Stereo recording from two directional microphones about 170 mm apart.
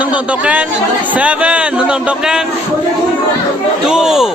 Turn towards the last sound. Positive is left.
turn(degrees=-5)  # may be behind; listen again after turning